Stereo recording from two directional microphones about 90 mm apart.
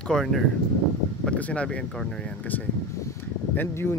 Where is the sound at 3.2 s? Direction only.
15° left (ahead or behind).